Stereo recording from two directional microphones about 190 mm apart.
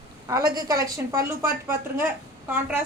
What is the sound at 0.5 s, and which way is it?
A woman's voice, 20° right (ahead or behind).